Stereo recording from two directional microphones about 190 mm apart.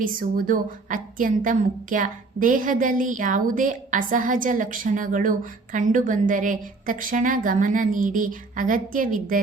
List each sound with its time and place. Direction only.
0.0 s a woman's voice: 45° right (ahead or behind)